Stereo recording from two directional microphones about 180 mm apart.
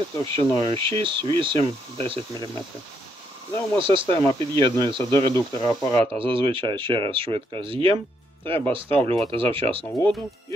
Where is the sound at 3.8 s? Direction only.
30° right (ahead or behind).